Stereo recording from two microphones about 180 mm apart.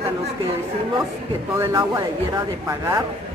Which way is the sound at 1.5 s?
20° right (ahead or behind).